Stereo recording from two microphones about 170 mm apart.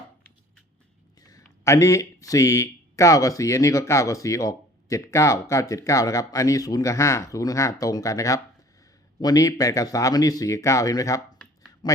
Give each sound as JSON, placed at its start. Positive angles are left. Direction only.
{"t": 1.2, "sound": "speech", "side_deg": 20}